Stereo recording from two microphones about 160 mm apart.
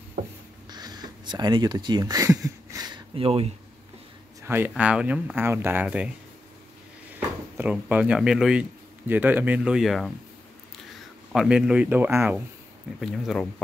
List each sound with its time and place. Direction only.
0.7 s a sound: 25° right (ahead or behind)
3.2 s speech: 35° right (ahead or behind)
4.4 s speech: 15° right (ahead or behind)
7.5 s speech: 10° right (ahead or behind)
11.3 s speech: 5° right (ahead or behind)
13.0 s speech: centre (ahead or behind)